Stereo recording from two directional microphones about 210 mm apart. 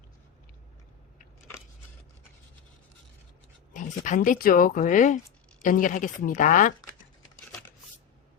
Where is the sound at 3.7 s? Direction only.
40° left (ahead or behind).